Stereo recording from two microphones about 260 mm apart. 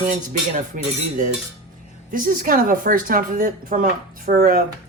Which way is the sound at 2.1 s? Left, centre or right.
Right.